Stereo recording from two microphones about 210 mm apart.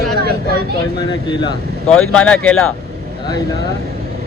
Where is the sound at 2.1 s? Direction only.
5° left (ahead or behind).